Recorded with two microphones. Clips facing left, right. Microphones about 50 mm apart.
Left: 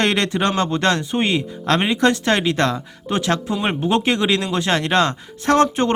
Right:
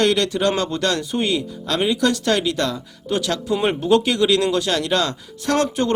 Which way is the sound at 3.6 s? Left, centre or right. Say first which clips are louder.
Right 3 dB; left.